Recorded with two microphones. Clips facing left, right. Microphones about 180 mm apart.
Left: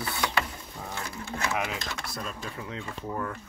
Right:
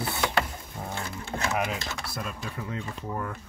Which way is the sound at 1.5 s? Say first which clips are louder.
Right 2 dB; 5° right (ahead or behind).